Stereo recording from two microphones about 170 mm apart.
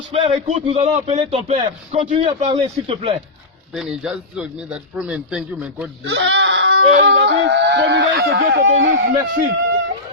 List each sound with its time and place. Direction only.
0.1 s speech: 35° right (ahead or behind)
2.1 s speech: 30° right (ahead or behind)
3.7 s a man's voice: 5° right (ahead or behind)
6.1 s a sound: 90° right
8.7 s speech: 50° right (ahead or behind)